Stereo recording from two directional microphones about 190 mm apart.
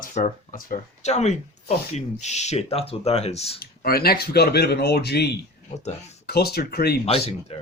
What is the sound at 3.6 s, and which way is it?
Speech, 55° left (ahead or behind).